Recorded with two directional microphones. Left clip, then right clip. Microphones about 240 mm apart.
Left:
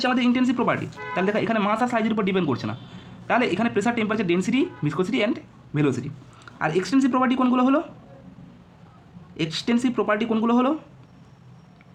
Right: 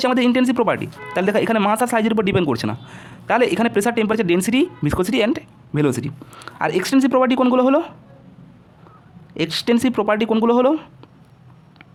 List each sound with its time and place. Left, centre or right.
0.0 s speech: right
9.3 s speech: right